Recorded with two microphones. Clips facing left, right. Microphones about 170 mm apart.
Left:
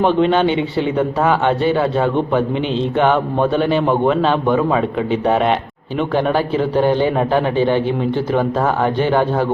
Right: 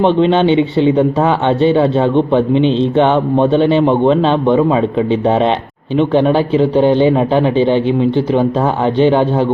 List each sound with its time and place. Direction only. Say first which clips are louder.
0.0 s speech: right 3 dB; 25° right (ahead or behind)